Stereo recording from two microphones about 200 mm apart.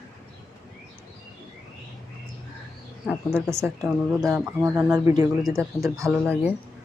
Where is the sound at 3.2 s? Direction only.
10° right (ahead or behind).